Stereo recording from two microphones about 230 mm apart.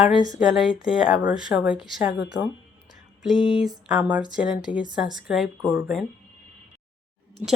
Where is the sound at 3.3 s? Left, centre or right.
Left.